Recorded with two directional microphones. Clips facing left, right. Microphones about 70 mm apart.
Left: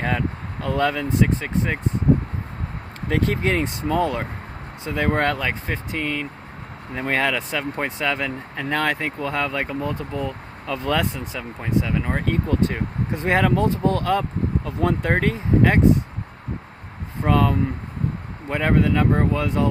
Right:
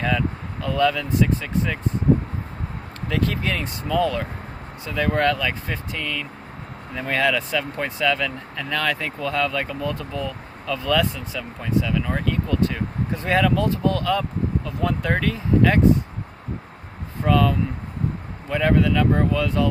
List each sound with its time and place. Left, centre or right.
0.0 s speech: left
0.8 s speech: left
3.1 s speech: left
13.1 s speech: left
17.2 s speech: left